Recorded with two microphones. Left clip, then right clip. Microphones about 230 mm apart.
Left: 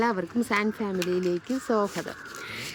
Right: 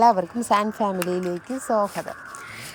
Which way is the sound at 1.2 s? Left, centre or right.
Left.